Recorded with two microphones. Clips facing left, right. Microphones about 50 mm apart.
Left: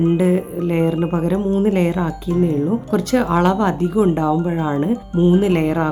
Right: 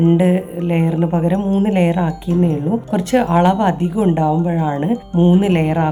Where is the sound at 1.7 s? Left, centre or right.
Right.